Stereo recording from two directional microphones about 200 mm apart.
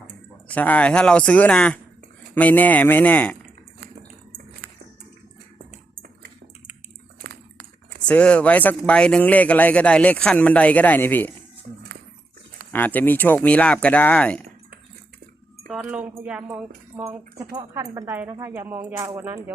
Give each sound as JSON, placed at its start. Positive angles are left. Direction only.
{"t": 0.4, "sound": "speech", "side_deg": 10}
{"t": 4.6, "sound": "a sound", "side_deg": -50}
{"t": 7.2, "sound": "a sound", "side_deg": -50}
{"t": 8.0, "sound": "speech", "side_deg": 5}
{"t": 12.7, "sound": "speech", "side_deg": 10}
{"t": 15.6, "sound": "speech", "side_deg": -5}
{"t": 17.5, "sound": "speech", "side_deg": -15}